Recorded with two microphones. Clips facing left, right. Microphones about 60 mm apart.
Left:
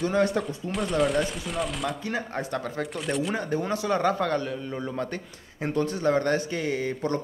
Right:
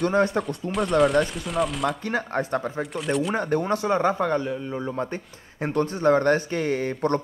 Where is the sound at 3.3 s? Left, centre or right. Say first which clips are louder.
Right 4 dB; right.